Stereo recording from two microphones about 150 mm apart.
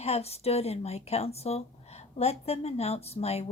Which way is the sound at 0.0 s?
45° left (ahead or behind).